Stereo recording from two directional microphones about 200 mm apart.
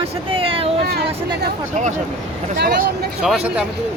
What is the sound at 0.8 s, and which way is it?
Speech, 55° right (ahead or behind).